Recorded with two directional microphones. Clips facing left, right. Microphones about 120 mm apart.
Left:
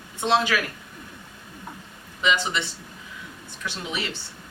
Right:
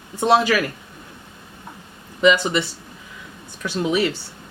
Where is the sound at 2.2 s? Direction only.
45° right (ahead or behind).